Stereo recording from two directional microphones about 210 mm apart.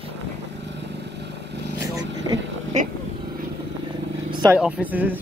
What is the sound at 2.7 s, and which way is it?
Vehicle, 35° right (ahead or behind).